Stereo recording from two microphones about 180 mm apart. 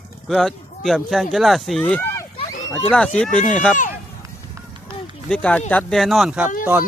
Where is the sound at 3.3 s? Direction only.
45° left (ahead or behind).